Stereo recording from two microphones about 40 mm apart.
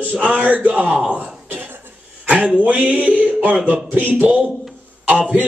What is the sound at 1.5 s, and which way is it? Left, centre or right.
Cough, right.